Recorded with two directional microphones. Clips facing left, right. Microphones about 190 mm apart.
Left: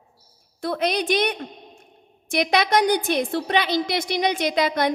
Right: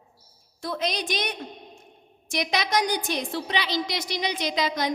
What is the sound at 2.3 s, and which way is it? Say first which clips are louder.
A woman's voice: left 5 dB; 60° left (ahead or behind).